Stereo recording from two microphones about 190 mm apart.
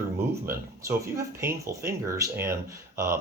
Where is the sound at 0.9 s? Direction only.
15° right (ahead or behind).